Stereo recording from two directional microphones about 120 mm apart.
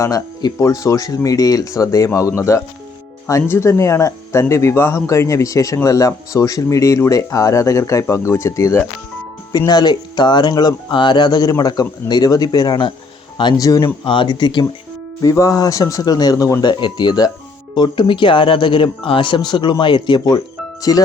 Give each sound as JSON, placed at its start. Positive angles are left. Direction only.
{"t": 0.0, "sound": "speech", "side_deg": 25}
{"t": 14.0, "sound": "speech", "side_deg": 45}
{"t": 15.2, "sound": "speech", "side_deg": 30}